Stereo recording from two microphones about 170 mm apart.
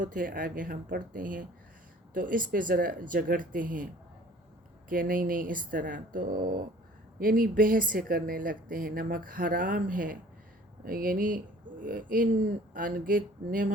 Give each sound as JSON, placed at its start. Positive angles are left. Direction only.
{"t": 0.0, "sound": "speech", "side_deg": -55}
{"t": 4.9, "sound": "speech", "side_deg": -55}